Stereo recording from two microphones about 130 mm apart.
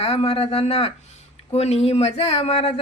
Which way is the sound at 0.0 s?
55° left (ahead or behind).